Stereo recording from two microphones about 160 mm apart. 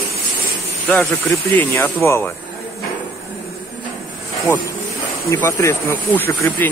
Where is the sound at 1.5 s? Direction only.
10° left (ahead or behind).